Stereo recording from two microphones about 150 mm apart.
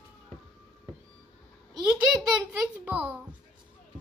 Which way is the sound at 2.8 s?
15° right (ahead or behind).